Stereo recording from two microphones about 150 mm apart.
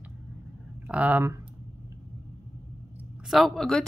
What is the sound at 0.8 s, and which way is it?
Speech, 10° right (ahead or behind).